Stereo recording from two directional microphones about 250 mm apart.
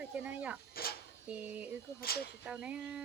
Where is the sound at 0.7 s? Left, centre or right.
Left.